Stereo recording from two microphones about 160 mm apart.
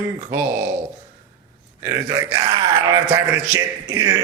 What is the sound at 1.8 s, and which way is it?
A man's voice, 20° right (ahead or behind).